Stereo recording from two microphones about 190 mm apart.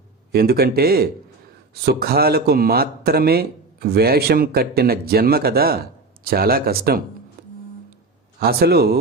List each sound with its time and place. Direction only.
0.3 s speech: 55° right (ahead or behind)
8.4 s speech: 55° right (ahead or behind)